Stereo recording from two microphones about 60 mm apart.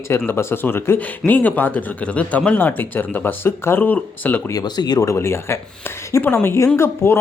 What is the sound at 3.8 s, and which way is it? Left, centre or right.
Speech, left.